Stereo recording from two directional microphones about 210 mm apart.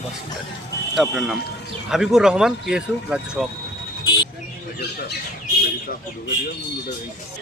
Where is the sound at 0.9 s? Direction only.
Centre (ahead or behind).